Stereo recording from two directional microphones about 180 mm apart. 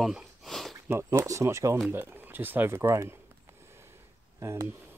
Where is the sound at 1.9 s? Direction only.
10° right (ahead or behind).